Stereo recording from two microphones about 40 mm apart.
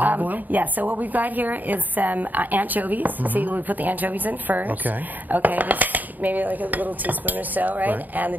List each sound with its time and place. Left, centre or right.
0.0 s a woman's voice: right